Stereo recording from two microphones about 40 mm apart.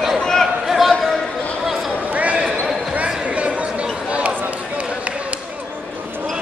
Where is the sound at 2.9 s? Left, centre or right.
Right.